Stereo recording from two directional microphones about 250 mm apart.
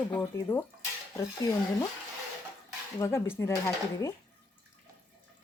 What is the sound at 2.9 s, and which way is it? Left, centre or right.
Speech, centre.